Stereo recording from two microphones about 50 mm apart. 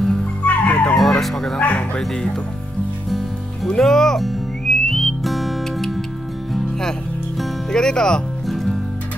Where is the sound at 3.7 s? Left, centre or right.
Centre.